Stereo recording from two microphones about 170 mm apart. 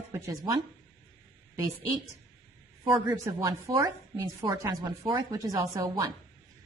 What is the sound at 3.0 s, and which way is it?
A woman's voice, 20° right (ahead or behind).